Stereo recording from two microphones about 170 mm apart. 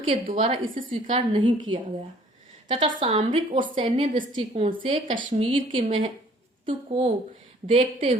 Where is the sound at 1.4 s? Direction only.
25° right (ahead or behind).